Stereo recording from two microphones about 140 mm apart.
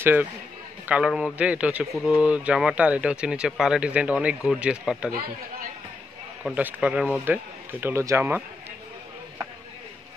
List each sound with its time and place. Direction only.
0.0 s speech: 15° right (ahead or behind)
6.4 s speech: 10° right (ahead or behind)
7.8 s speech: 20° right (ahead or behind)